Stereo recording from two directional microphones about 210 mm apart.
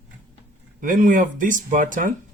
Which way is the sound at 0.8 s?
40° right (ahead or behind).